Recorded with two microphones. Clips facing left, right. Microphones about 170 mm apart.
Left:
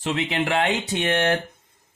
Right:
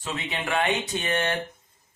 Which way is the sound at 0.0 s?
75° left (ahead or behind).